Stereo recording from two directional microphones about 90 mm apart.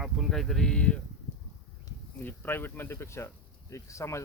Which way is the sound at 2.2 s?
20° left (ahead or behind).